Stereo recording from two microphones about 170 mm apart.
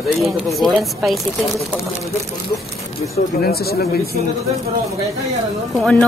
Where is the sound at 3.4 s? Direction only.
65° left (ahead or behind).